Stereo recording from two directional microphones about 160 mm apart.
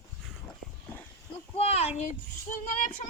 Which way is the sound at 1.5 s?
40° left (ahead or behind).